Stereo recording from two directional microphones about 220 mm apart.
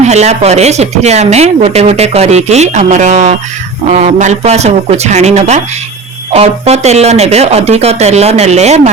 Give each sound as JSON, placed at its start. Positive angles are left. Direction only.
{"t": 0.0, "sound": "speech", "side_deg": -30}